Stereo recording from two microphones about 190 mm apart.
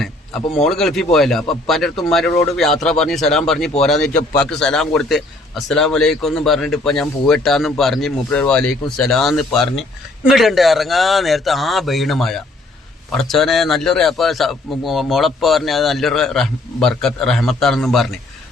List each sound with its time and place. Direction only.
0.6 s a man's voice: centre (ahead or behind)
4.1 s a man's voice: 40° left (ahead or behind)
4.4 s a man's voice: 5° left (ahead or behind)